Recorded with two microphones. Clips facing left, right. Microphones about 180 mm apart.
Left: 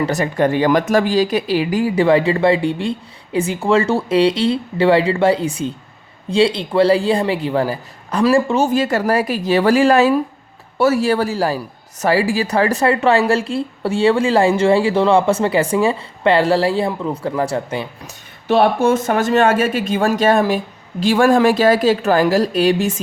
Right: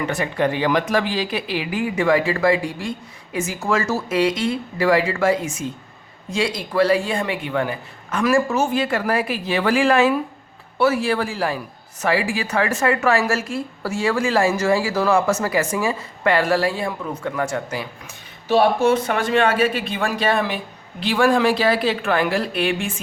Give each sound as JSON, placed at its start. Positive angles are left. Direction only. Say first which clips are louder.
{"t": 0.0, "sound": "a woman's voice", "louder": "left 4 dB", "side_deg": 40}
{"t": 18.4, "sound": "a woman's voice", "louder": "left 2 dB", "side_deg": 60}